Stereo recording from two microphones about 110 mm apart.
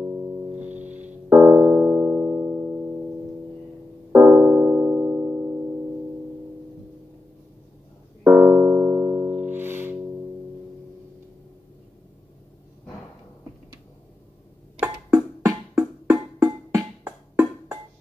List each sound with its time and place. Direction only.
0.7 s piano: 15° right (ahead or behind)
4.1 s keyboard: 20° right (ahead or behind)
8.2 s music: 15° right (ahead or behind)
15.8 s music: 35° right (ahead or behind)